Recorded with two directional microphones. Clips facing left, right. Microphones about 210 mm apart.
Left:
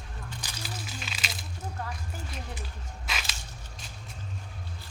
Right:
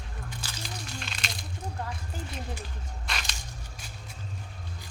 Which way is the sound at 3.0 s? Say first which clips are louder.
Even; 5° left (ahead or behind).